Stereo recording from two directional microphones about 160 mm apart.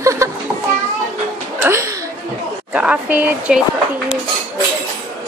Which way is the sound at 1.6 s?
15° right (ahead or behind).